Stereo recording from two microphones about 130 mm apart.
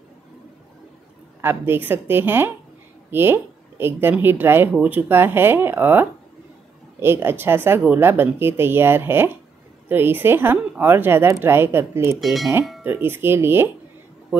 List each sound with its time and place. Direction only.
1.4 s a woman's voice: 15° right (ahead or behind)
12.2 s speech: centre (ahead or behind)
12.8 s speech: 15° right (ahead or behind)